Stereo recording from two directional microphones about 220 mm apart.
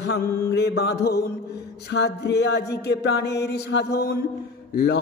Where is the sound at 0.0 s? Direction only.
50° left (ahead or behind).